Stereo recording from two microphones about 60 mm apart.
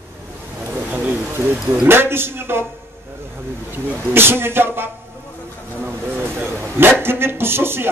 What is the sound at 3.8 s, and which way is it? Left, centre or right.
Speech, right.